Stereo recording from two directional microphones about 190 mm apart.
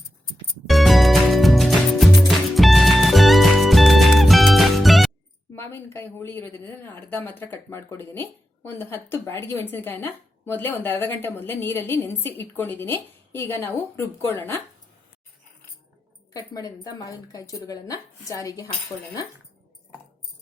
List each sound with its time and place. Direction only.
0.7 s music: centre (ahead or behind)
5.5 s speech: 10° left (ahead or behind)
16.3 s speech: 20° left (ahead or behind)